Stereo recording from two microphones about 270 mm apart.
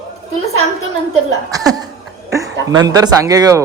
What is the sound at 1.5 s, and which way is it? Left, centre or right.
Speech, centre.